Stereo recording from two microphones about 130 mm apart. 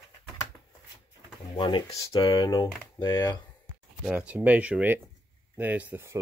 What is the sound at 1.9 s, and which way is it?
Speech, 25° left (ahead or behind).